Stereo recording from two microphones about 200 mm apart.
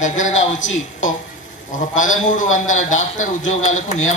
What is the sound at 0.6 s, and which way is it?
Speech, 75° left (ahead or behind).